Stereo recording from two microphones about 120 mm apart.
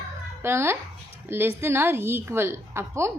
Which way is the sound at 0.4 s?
20° right (ahead or behind).